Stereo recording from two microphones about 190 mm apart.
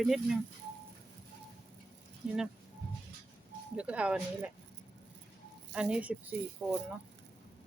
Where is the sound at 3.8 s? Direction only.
5° right (ahead or behind).